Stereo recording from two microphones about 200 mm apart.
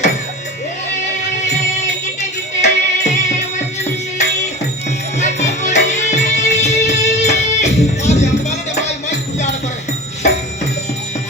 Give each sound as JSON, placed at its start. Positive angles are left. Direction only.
{"t": 2.6, "sound": "music", "side_deg": 35}
{"t": 5.1, "sound": "music", "side_deg": 35}